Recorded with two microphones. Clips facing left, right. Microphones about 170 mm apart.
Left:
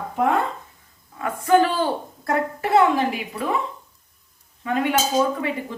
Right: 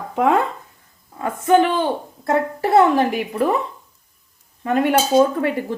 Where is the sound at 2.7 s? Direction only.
50° right (ahead or behind).